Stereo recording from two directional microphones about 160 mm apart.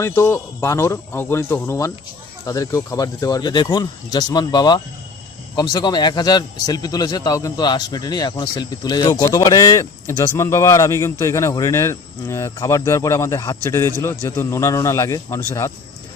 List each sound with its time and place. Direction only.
0.0 s a man's voice: 15° left (ahead or behind)